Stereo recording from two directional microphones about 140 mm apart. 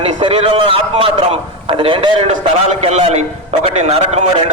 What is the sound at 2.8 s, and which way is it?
A man's voice, 50° right (ahead or behind).